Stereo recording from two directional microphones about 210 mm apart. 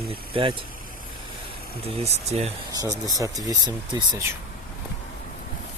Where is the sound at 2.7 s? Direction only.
15° right (ahead or behind).